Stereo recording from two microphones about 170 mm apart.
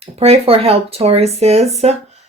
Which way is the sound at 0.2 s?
35° right (ahead or behind).